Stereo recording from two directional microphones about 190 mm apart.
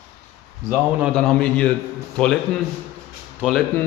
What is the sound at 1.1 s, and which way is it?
A man's voice, 5° left (ahead or behind).